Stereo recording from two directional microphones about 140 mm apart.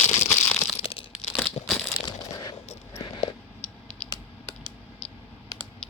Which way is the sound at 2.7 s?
50° left (ahead or behind).